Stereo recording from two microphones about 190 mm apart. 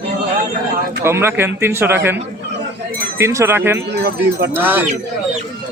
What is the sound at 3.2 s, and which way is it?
Speech, 15° right (ahead or behind).